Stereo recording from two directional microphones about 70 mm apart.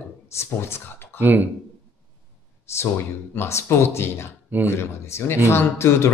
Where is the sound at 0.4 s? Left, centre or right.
Left.